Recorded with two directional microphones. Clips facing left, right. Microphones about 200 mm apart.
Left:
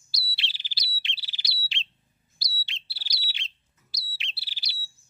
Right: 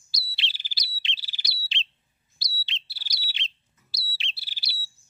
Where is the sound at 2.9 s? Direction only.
45° right (ahead or behind).